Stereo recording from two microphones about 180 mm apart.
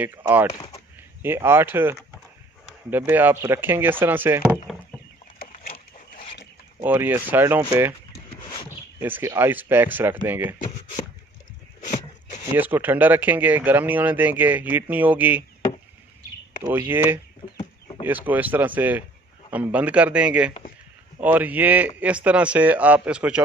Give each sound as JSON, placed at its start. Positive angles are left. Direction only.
{"t": 0.0, "sound": "speech", "side_deg": -10}
{"t": 5.6, "sound": "a sound", "side_deg": 50}
{"t": 6.8, "sound": "speech", "side_deg": -10}
{"t": 8.3, "sound": "a sound", "side_deg": 25}
{"t": 8.6, "sound": "speech", "side_deg": -10}
{"t": 12.5, "sound": "speech", "side_deg": -10}
{"t": 16.6, "sound": "speech", "side_deg": -15}
{"t": 17.6, "sound": "chicken", "side_deg": 25}
{"t": 18.0, "sound": "speech", "side_deg": -10}